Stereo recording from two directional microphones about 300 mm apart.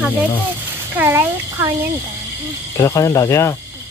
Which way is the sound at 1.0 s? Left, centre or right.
Centre.